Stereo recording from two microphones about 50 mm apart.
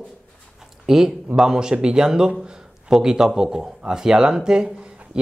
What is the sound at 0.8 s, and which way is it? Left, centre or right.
A man's voice, centre.